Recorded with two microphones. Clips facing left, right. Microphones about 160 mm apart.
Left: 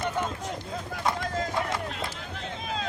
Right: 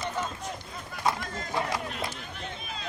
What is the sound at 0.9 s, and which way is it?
Vehicle, 90° left.